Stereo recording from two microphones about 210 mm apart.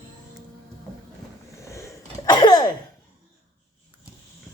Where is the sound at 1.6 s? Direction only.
15° left (ahead or behind).